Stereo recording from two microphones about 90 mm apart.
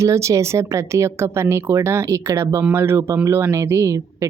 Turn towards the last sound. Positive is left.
turn(degrees=-35)  # may be behind; listen again after turning